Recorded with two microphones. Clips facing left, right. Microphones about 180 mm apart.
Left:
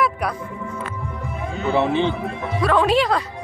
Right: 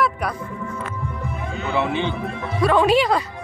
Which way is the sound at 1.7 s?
35° left (ahead or behind).